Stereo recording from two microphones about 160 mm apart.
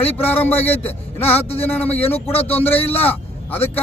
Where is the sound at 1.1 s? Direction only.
40° left (ahead or behind).